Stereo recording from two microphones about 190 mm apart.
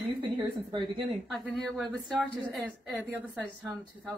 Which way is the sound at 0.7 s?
25° right (ahead or behind).